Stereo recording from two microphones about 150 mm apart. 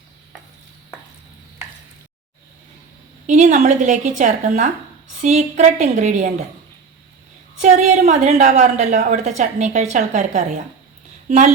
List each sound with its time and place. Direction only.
3.2 s a woman's voice: 55° right (ahead or behind)
7.6 s a woman's voice: 50° right (ahead or behind)